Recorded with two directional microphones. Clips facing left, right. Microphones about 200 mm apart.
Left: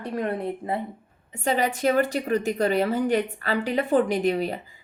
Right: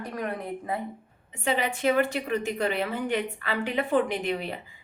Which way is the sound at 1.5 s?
40° left (ahead or behind).